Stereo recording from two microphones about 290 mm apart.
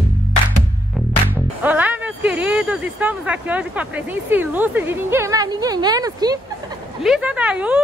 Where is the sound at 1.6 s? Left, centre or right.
Centre.